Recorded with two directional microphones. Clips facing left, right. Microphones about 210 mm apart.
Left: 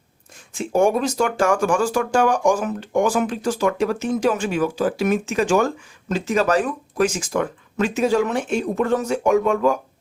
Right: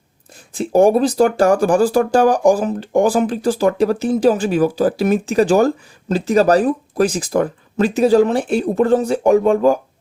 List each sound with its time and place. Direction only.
0.5 s speech: 35° right (ahead or behind)